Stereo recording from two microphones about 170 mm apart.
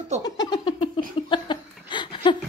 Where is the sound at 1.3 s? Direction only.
25° left (ahead or behind).